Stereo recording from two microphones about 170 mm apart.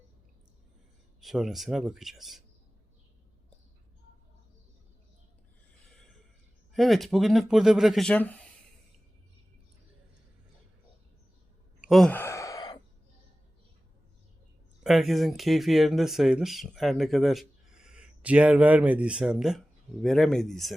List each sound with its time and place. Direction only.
1.2 s speech: centre (ahead or behind)
6.7 s speech: centre (ahead or behind)
11.8 s speech: centre (ahead or behind)
12.1 s sigh: 15° left (ahead or behind)
14.8 s speech: centre (ahead or behind)